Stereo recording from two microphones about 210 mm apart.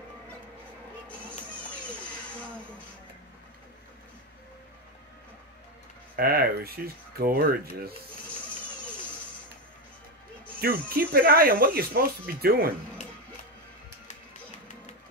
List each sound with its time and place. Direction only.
6.1 s speech: 45° right (ahead or behind)
10.6 s speech: 45° right (ahead or behind)